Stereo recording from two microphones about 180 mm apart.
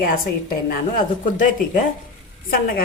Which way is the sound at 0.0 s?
55° left (ahead or behind).